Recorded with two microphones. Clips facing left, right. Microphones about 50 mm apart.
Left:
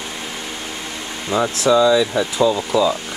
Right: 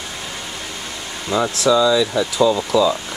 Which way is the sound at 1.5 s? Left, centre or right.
Left.